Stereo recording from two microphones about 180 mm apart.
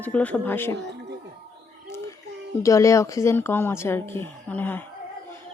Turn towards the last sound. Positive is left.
turn(degrees=10)  # may be behind; listen again after turning